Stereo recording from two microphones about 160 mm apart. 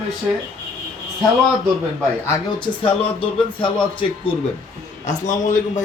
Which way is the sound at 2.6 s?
35° left (ahead or behind).